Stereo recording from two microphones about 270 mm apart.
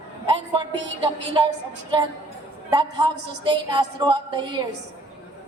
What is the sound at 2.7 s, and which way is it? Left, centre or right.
A woman's voice, centre.